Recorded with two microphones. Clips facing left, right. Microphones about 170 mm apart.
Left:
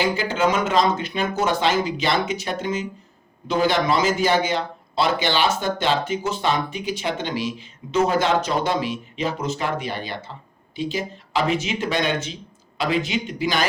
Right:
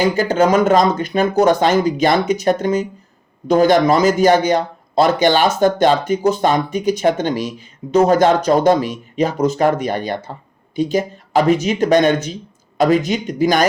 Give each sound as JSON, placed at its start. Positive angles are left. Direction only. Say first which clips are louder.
{"t": 0.0, "sound": "speech", "louder": "right 6 dB", "side_deg": -45}